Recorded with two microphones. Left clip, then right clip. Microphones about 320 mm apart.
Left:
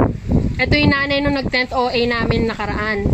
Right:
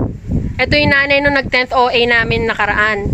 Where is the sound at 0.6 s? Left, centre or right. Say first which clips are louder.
Right 5 dB; right.